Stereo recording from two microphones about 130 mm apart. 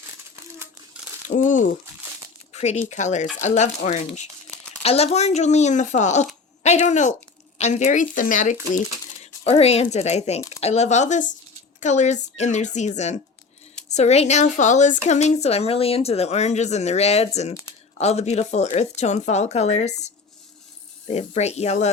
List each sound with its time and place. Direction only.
0.9 s crumpling: 10° right (ahead or behind)
1.3 s speech: 75° left (ahead or behind)
2.5 s a sound: 55° left (ahead or behind)
2.9 s a woman's voice: 65° left (ahead or behind)
4.8 s a woman's voice: 50° left (ahead or behind); by 8.5 s 85° left
9.2 s a woman's voice: 50° left (ahead or behind)